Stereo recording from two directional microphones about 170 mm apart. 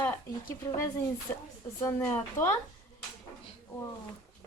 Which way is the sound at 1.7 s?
15° left (ahead or behind).